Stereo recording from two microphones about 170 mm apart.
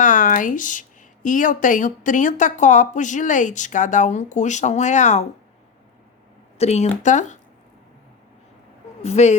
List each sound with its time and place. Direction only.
0.0 s speech: 50° left (ahead or behind)
6.6 s speech: 40° left (ahead or behind)
9.0 s speech: 40° left (ahead or behind)